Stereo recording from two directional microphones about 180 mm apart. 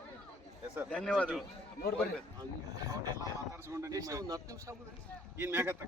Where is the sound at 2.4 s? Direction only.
20° right (ahead or behind).